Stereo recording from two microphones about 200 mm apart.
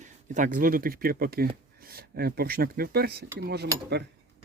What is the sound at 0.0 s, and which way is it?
Speech, 40° right (ahead or behind).